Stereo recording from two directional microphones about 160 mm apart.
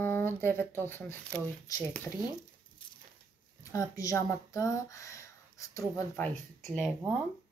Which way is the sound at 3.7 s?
20° left (ahead or behind).